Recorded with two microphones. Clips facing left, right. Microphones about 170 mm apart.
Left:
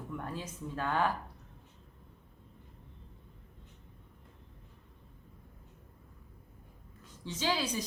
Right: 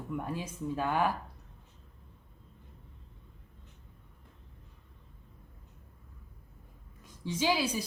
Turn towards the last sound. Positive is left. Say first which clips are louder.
# right 3 dB
turn(degrees=-10)  # may be behind; listen again after turning